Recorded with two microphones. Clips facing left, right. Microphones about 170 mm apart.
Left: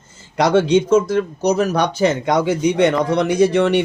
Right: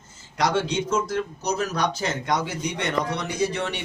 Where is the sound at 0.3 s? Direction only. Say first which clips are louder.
Left 9 dB; 65° left (ahead or behind).